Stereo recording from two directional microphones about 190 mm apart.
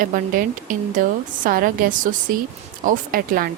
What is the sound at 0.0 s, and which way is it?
Speech, 45° right (ahead or behind).